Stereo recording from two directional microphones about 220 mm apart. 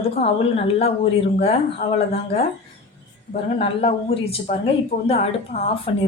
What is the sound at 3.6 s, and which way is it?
Speech, 25° left (ahead or behind).